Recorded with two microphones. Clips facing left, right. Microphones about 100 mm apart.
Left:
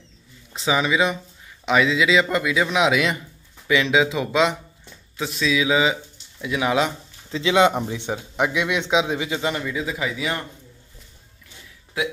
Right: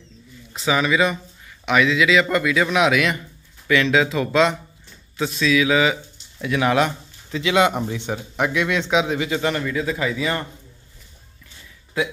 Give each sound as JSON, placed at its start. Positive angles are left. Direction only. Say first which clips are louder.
{"t": 0.6, "sound": "speech", "louder": "right 1 dB", "side_deg": 20}
{"t": 5.5, "sound": "speech", "louder": "right 2 dB", "side_deg": 20}
{"t": 7.2, "sound": "speech", "louder": "left 1 dB", "side_deg": 25}